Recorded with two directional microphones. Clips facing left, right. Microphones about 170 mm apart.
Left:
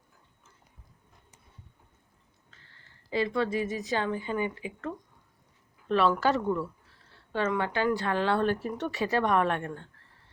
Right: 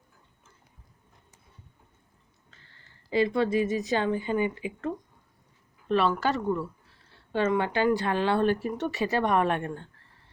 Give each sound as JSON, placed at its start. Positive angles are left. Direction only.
{"t": 3.1, "sound": "speech", "side_deg": -20}
{"t": 5.9, "sound": "speech", "side_deg": 0}
{"t": 7.3, "sound": "a woman's voice", "side_deg": -20}
{"t": 8.8, "sound": "a woman's voice", "side_deg": -5}